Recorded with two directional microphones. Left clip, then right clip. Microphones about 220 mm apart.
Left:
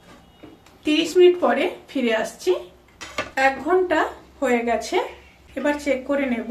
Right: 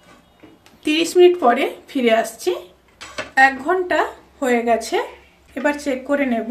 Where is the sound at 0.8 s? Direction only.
45° right (ahead or behind).